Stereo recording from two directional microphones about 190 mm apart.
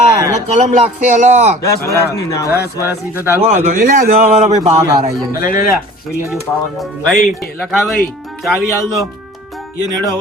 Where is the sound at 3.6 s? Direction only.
45° right (ahead or behind).